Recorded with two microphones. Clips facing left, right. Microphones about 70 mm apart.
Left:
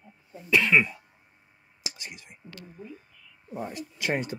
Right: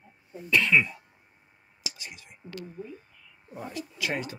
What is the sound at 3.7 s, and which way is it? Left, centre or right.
Speech, left.